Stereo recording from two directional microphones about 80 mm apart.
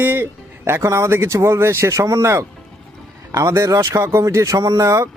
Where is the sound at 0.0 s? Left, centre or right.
Right.